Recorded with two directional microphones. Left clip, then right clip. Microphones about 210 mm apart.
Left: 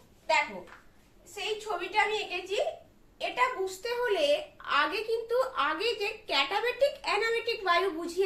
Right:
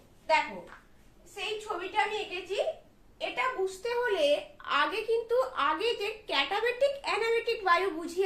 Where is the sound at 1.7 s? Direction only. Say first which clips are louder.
Left 3 dB; 15° right (ahead or behind).